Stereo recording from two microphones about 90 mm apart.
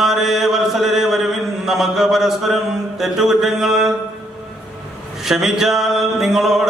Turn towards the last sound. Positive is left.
turn(degrees=-5)  # may be behind; listen again after turning